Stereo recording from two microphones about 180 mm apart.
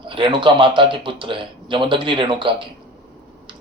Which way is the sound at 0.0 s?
25° right (ahead or behind).